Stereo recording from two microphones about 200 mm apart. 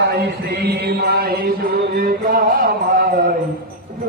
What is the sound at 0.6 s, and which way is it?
Chant, 55° right (ahead or behind).